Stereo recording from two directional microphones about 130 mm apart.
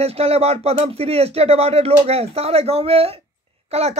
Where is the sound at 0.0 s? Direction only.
50° right (ahead or behind).